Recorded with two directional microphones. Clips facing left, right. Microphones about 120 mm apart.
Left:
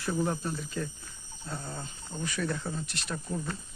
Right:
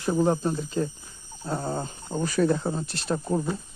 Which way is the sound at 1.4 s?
45° right (ahead or behind).